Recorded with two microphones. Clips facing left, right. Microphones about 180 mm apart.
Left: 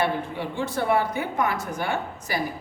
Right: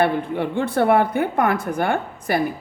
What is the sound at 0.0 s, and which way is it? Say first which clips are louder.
A woman's voice: right 6 dB; 60° right (ahead or behind).